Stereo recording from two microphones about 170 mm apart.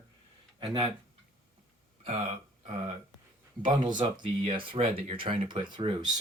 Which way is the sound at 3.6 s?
25° right (ahead or behind).